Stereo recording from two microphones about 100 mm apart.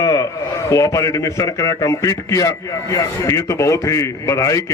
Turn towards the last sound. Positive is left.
turn(degrees=30)  # may be behind; listen again after turning